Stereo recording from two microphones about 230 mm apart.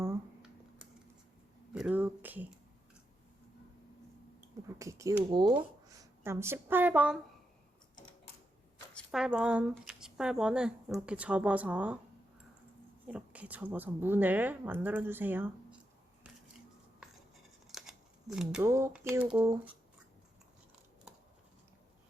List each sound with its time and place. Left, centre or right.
0.0 s computer keyboard: centre
1.7 s a sound: centre
4.8 s speech: centre
9.0 s speech: centre
13.1 s a woman's voice: centre
17.7 s speech: centre